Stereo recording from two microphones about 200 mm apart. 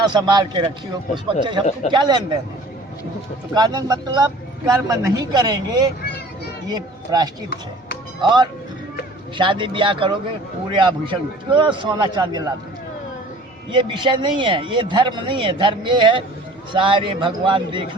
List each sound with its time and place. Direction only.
0.0 s speech: 20° right (ahead or behind)
3.5 s speech: 20° right (ahead or behind)
9.4 s speech: 25° right (ahead or behind)
13.7 s speech: 25° right (ahead or behind)